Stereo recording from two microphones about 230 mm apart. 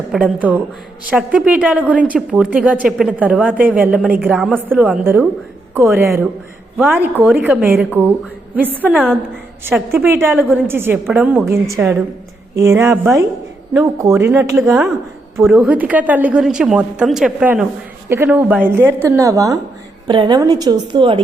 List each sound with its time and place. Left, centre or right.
0.1 s a woman's voice: centre; by 21.2 s right